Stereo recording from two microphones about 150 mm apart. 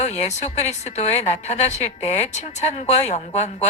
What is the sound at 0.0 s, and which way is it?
Speech, 50° left (ahead or behind).